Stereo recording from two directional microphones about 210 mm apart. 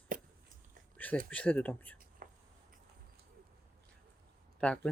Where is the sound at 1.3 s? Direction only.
5° left (ahead or behind).